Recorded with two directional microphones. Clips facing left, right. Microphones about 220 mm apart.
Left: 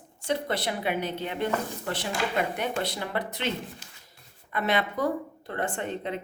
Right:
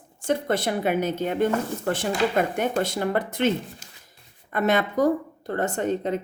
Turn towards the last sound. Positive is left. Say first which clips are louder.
# right 7 dB
turn(degrees=-40)  # may be behind; listen again after turning